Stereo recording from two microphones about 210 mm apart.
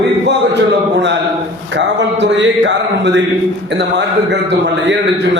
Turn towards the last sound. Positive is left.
turn(degrees=-55)  # may be behind; listen again after turning